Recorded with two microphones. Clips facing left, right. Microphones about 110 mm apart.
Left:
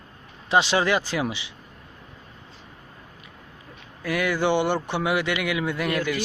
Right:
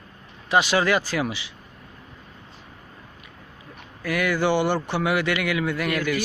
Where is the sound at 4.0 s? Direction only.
25° left (ahead or behind).